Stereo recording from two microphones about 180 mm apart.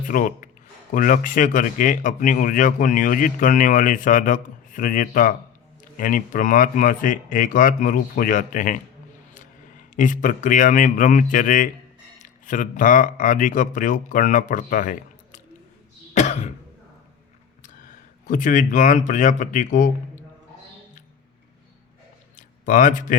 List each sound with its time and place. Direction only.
0.1 s speech: 50° left (ahead or behind)
9.9 s speech: 45° left (ahead or behind)
16.1 s cough: 40° left (ahead or behind)
17.6 s speech: 45° left (ahead or behind)
22.4 s a sound: 45° left (ahead or behind)